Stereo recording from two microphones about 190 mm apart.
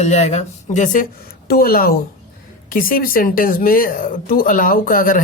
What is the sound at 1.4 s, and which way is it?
Speech, 50° left (ahead or behind).